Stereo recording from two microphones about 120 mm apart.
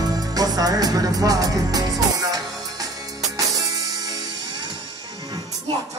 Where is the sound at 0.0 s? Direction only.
30° right (ahead or behind).